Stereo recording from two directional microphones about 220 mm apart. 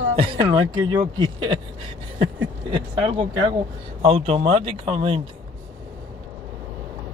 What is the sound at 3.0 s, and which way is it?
Speech, 25° right (ahead or behind).